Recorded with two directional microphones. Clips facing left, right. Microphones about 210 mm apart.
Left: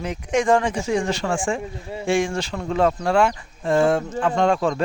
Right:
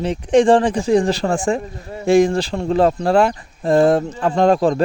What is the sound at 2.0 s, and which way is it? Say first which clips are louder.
Speech: right 8 dB; 40° right (ahead or behind).